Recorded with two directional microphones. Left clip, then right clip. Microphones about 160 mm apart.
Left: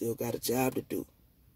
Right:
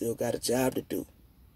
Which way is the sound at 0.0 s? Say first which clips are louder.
Right 3 dB; 20° left (ahead or behind).